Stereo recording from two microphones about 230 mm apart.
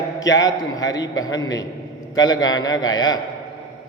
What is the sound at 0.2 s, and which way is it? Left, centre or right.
A man's voice, centre.